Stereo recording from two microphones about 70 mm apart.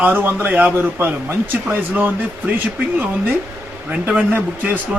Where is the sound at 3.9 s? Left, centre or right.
Right.